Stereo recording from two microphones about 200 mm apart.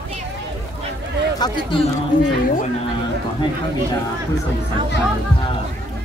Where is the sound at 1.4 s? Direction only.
20° left (ahead or behind).